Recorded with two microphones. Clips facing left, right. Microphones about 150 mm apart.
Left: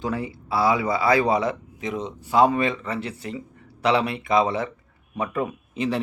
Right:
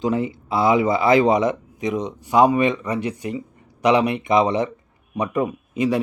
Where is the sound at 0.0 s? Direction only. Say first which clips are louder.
Right 6 dB; 20° right (ahead or behind).